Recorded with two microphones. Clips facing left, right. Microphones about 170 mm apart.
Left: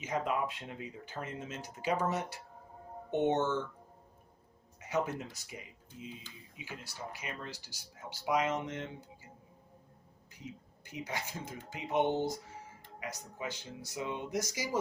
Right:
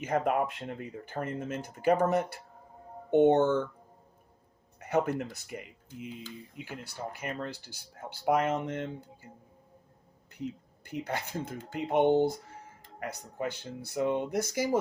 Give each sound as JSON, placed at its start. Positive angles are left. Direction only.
{"t": 0.0, "sound": "speech", "side_deg": -55}
{"t": 4.8, "sound": "speech", "side_deg": -55}
{"t": 10.3, "sound": "speech", "side_deg": -60}